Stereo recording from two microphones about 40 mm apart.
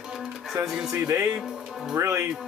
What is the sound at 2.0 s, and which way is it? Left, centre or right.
Music, right.